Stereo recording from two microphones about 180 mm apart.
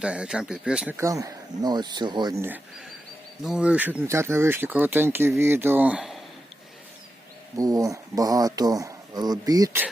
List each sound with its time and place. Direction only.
0.0 s speech: 5° right (ahead or behind); by 2.4 s 25° right (ahead or behind)
3.4 s speech: 5° right (ahead or behind)
7.5 s speech: 20° right (ahead or behind)